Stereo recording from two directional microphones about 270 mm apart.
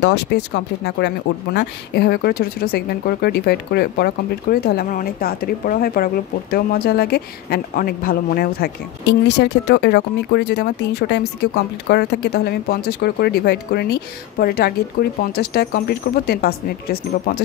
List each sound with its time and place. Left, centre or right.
0.3 s speech: left